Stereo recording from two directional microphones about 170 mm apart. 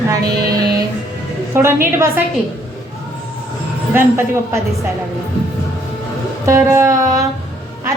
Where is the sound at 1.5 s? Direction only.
15° right (ahead or behind).